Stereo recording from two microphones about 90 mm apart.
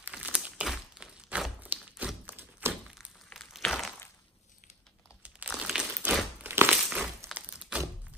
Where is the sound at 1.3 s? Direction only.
15° right (ahead or behind).